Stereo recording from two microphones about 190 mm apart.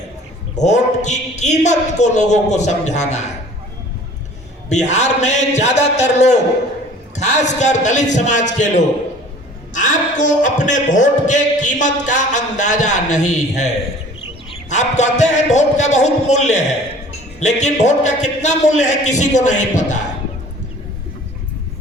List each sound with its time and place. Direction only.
0.5 s a man's voice: 40° left (ahead or behind)
4.7 s a man's voice: 40° left (ahead or behind)
14.7 s a man's voice: 40° left (ahead or behind)